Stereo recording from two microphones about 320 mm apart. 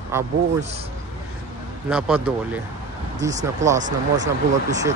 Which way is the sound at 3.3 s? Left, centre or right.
Right.